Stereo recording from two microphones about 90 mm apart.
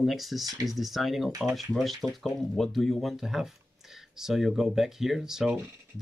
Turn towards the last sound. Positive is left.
turn(degrees=-5)  # may be behind; listen again after turning